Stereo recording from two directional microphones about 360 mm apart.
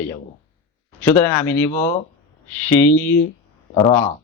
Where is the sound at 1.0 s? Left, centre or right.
Centre.